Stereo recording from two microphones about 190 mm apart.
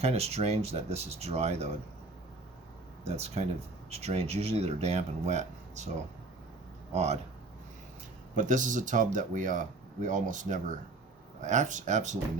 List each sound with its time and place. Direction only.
0.0 s speech: 35° right (ahead or behind)
3.0 s speech: 35° right (ahead or behind)
6.9 s speech: 35° right (ahead or behind)
8.4 s speech: 40° right (ahead or behind)